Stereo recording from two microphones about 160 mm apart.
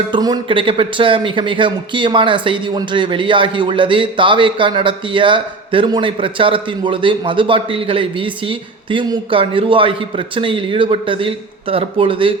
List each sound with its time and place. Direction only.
0.1 s speech: 25° right (ahead or behind)